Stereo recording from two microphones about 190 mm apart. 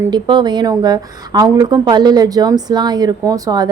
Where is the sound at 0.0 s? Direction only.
25° right (ahead or behind).